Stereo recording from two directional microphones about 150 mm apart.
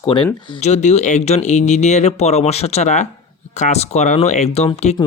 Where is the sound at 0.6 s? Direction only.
50° left (ahead or behind).